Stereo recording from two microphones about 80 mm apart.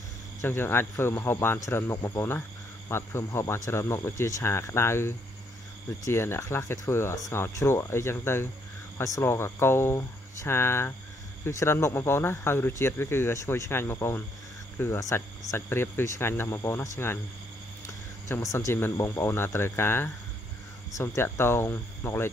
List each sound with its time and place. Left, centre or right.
0.4 s speech: left
2.0 s speech: left
2.9 s speech: left
15.0 s speech: left
18.4 s speech: left
19.0 s speech: left